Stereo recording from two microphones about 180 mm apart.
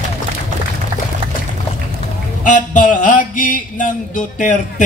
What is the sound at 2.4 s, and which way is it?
A man's voice, 45° left (ahead or behind).